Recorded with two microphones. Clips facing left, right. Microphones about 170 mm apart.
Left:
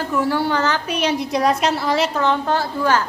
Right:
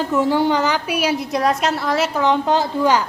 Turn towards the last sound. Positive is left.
turn(degrees=-15)  # may be behind; listen again after turning